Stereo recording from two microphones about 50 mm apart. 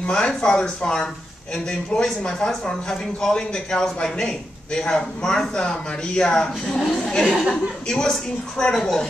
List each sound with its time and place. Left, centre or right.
0.0 s speech: left
7.2 s speech: centre
7.9 s speech: centre